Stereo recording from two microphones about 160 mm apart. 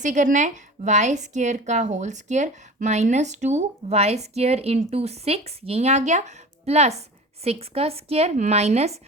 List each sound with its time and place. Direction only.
0.0 s a woman's voice: 50° right (ahead or behind)